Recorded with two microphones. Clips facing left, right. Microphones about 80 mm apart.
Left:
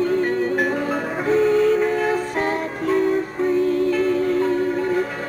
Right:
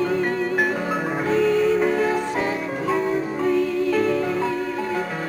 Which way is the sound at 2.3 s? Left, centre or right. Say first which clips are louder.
Left 1 dB; left.